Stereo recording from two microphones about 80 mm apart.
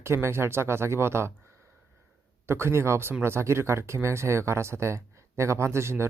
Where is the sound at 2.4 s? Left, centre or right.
Right.